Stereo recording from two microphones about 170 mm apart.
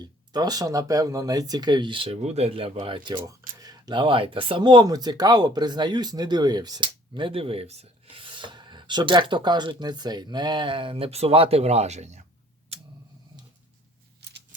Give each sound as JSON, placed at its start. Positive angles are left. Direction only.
{"t": 0.0, "sound": "speech", "side_deg": -25}
{"t": 14.2, "sound": "scissors", "side_deg": -80}